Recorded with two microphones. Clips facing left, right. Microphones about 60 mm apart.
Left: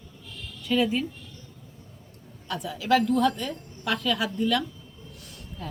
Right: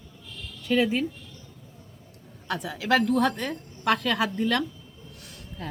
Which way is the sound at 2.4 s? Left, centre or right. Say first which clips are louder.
Left 1 dB; right.